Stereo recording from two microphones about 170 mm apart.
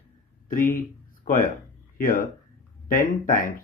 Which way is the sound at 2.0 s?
55° left (ahead or behind).